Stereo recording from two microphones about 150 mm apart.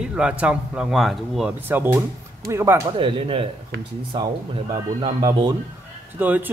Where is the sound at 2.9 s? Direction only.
35° right (ahead or behind).